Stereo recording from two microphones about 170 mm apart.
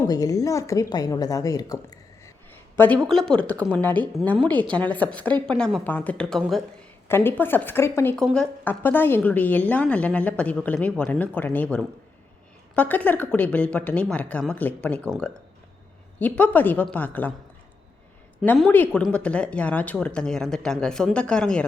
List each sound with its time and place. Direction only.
0.0 s a woman's voice: 20° left (ahead or behind)
2.7 s a woman's voice: 10° left (ahead or behind)
8.1 s a woman's voice: 5° left (ahead or behind)
18.4 s a woman's voice: 5° left (ahead or behind)